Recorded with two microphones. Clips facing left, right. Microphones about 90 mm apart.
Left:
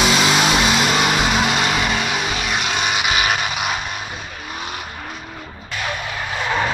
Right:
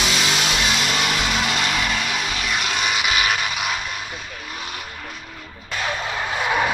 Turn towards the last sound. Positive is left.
turn(degrees=-10)  # may be behind; listen again after turning